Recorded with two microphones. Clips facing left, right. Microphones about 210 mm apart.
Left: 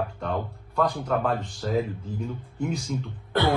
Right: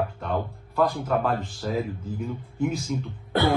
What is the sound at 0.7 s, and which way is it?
Speech, centre (ahead or behind).